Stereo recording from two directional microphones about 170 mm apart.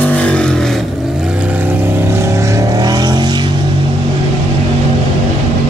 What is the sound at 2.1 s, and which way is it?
Vehicle, 15° right (ahead or behind).